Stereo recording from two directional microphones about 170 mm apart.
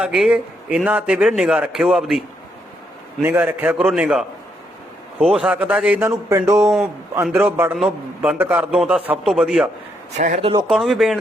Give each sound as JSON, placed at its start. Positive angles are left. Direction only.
{"t": 0.0, "sound": "a man's voice", "side_deg": -5}
{"t": 3.2, "sound": "a man's voice", "side_deg": -10}
{"t": 10.1, "sound": "a man's voice", "side_deg": -45}
{"t": 10.6, "sound": "a man's voice", "side_deg": 0}